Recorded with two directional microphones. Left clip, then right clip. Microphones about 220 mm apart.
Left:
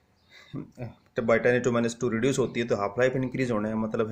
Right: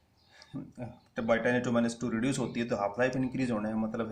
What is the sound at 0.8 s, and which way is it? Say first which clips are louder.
Speech: left 6 dB; 45° left (ahead or behind).